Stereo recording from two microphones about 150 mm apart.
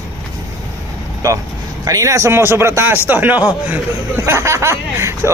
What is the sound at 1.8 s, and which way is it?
A man's voice, 20° right (ahead or behind).